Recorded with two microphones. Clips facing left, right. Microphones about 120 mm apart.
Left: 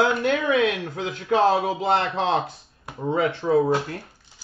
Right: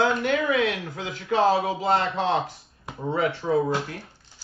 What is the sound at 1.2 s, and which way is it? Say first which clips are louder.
Speech: left 2 dB; 40° left (ahead or behind).